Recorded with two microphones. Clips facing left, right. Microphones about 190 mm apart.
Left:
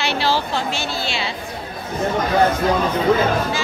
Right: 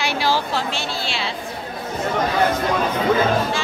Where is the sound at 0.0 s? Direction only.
10° right (ahead or behind).